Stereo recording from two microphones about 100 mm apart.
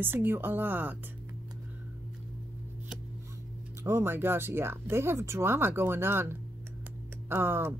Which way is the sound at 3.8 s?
25° right (ahead or behind).